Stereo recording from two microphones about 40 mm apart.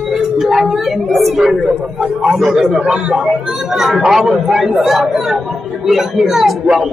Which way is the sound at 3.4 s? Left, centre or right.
Centre.